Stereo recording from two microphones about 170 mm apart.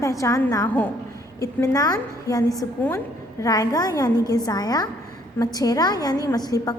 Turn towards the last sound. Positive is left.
turn(degrees=20)  # may be behind; listen again after turning